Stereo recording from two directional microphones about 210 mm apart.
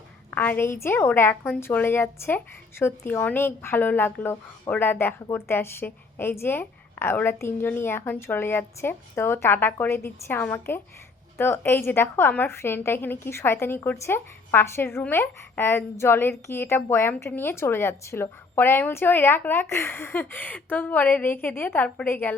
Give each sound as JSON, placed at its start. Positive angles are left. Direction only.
{"t": 0.3, "sound": "speech", "side_deg": 10}